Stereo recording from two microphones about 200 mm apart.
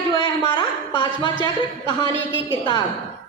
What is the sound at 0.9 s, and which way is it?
Speech, 20° left (ahead or behind).